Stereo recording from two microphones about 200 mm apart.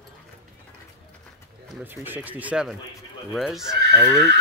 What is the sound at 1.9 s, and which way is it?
Speech, 10° right (ahead or behind).